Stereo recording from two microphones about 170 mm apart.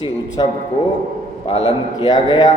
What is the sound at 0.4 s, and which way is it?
A man's voice, 25° left (ahead or behind).